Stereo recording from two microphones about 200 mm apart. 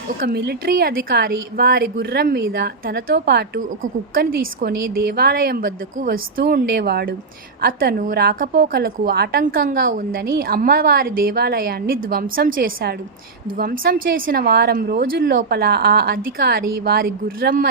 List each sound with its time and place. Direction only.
0.2 s a woman's voice: 50° right (ahead or behind)